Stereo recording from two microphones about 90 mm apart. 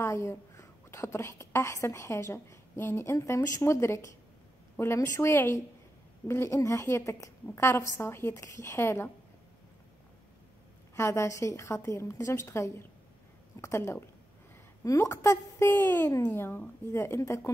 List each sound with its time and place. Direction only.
0.0 s a woman's voice: 30° left (ahead or behind)
11.0 s a woman's voice: 30° left (ahead or behind)